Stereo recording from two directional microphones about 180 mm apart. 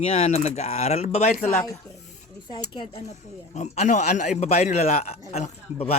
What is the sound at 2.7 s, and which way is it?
Speech, 35° left (ahead or behind).